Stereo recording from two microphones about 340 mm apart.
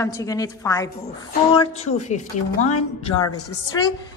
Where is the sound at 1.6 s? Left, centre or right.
Centre.